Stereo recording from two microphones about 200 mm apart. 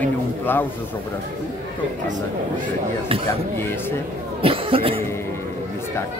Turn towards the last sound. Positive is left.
turn(degrees=-30)  # may be behind; listen again after turning